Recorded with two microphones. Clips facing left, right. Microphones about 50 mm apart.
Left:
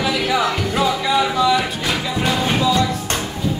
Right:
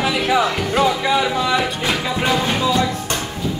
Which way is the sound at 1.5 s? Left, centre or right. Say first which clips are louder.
Right 1 dB; right.